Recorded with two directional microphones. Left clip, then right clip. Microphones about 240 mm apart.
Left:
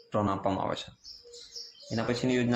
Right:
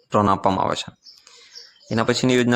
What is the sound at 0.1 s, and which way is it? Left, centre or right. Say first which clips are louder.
Speech: right 11 dB; right.